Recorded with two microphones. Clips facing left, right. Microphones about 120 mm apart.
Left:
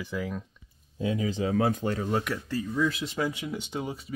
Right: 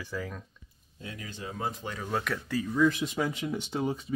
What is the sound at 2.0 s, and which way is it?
Speech, 15° left (ahead or behind).